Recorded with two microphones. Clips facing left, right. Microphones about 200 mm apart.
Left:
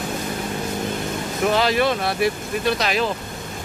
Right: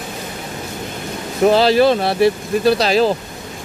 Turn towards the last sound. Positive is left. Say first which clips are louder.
# right 7 dB
turn(degrees=-30)  # may be behind; listen again after turning